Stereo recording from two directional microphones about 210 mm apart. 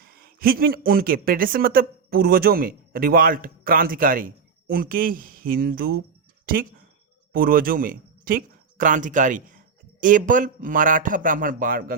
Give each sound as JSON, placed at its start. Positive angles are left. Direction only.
{"t": 0.0, "sound": "speech", "side_deg": -45}